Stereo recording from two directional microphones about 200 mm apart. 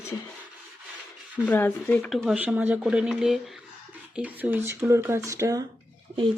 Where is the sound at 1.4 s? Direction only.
10° left (ahead or behind); by 5.6 s 15° right (ahead or behind).